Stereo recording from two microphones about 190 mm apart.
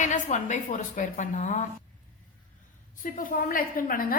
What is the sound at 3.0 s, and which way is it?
A woman's voice, 45° left (ahead or behind).